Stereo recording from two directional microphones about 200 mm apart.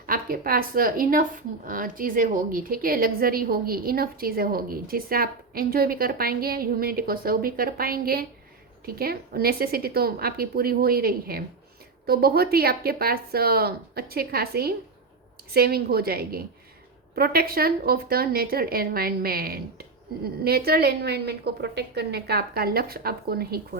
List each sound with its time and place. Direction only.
0.0 s a woman's voice: 45° right (ahead or behind)